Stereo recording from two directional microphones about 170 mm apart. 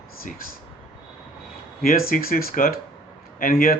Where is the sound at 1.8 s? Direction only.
60° left (ahead or behind).